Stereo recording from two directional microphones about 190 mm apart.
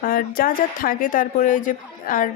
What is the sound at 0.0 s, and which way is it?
Speech, 50° left (ahead or behind).